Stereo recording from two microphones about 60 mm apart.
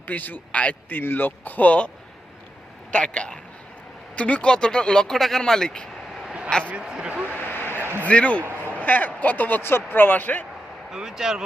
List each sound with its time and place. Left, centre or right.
0.1 s a man's voice: left
0.9 s speech: left
2.9 s speech: centre
6.8 s speech: centre
7.1 s speech: right
7.7 s a sound: right
8.0 s a man's voice: left
10.9 s speech: centre